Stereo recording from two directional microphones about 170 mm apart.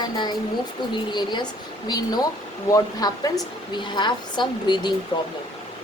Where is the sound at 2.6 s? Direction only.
20° left (ahead or behind).